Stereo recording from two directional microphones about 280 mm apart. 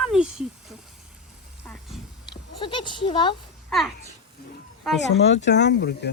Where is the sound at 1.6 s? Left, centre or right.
Centre.